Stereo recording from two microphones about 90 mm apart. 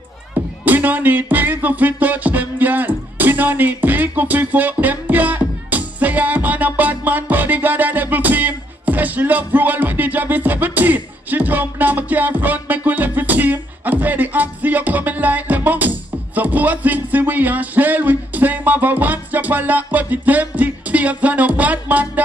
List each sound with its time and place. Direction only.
0.3 s music: 20° right (ahead or behind)